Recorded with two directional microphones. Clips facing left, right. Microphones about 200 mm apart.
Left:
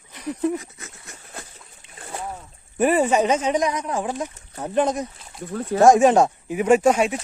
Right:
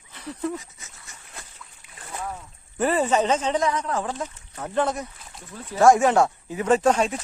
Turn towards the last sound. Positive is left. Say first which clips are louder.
# left 3 dB
turn(degrees=10)  # may be behind; listen again after turning